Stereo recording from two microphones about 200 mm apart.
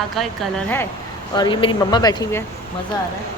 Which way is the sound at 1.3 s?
20° left (ahead or behind).